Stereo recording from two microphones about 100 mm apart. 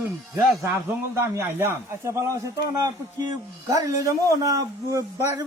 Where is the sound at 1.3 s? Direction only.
25° right (ahead or behind).